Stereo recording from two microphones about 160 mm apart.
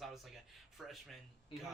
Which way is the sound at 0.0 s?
Centre (ahead or behind).